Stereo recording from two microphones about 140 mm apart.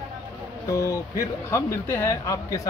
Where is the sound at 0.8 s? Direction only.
20° left (ahead or behind).